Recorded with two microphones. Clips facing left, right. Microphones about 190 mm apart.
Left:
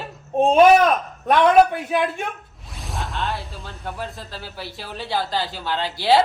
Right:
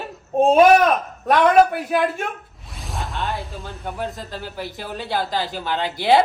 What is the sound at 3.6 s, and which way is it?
Speech, 15° right (ahead or behind).